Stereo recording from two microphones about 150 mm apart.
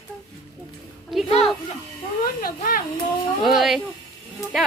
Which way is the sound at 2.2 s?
75° left (ahead or behind).